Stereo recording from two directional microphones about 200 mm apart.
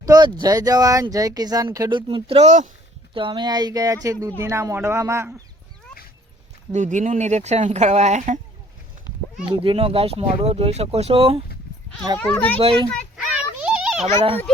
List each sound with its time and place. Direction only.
0.0 s speech: 20° right (ahead or behind)
3.2 s speech: 25° right (ahead or behind)
6.7 s speech: 40° right (ahead or behind)
9.5 s speech: 30° right (ahead or behind)
12.2 s a child's voice: 5° left (ahead or behind)
12.5 s speech: 25° right (ahead or behind)
13.3 s children playing: 5° right (ahead or behind)
14.2 s speech: 30° right (ahead or behind)